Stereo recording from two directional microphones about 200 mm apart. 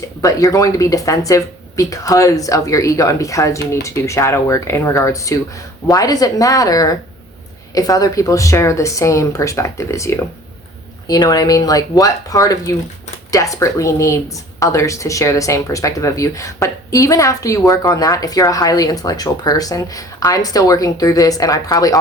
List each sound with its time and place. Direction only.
0.2 s speech: 15° left (ahead or behind)